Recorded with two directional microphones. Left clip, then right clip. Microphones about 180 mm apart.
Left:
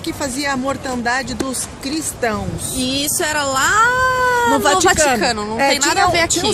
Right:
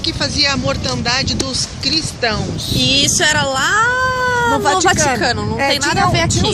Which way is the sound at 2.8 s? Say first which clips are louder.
Right 6 dB; 5° right (ahead or behind).